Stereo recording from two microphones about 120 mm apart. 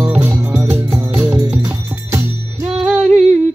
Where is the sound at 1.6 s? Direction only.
25° right (ahead or behind).